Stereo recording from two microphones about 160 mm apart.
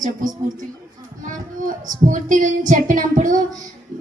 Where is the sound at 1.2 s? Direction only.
55° right (ahead or behind).